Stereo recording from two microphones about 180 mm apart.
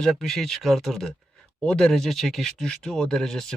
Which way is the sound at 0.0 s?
Centre (ahead or behind).